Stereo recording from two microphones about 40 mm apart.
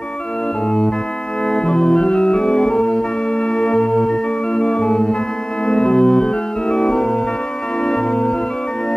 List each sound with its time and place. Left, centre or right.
1.5 s organ: left
3.5 s music: left
5.7 s organ: centre